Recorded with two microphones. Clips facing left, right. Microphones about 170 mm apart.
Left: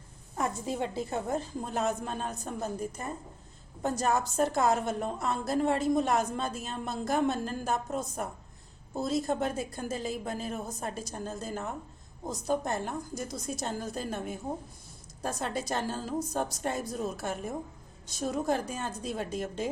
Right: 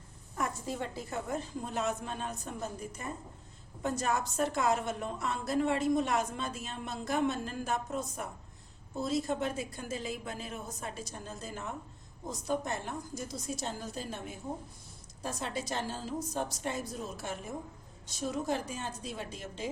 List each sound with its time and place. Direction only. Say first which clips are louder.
0.3 s a woman's voice: left 4 dB; 20° left (ahead or behind)
1.3 s a woman's voice: left 4 dB; 35° left (ahead or behind)